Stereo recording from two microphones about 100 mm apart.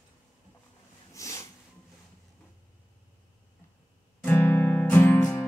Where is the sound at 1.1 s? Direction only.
30° left (ahead or behind).